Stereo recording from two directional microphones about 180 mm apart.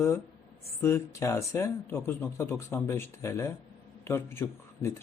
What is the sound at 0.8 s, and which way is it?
Speech, 15° left (ahead or behind).